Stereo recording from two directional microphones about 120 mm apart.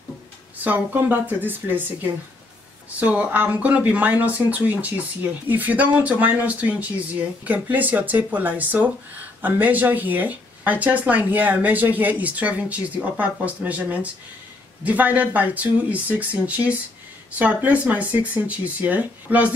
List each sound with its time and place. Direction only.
0.7 s speech: 15° right (ahead or behind)
3.0 s speech: 10° right (ahead or behind)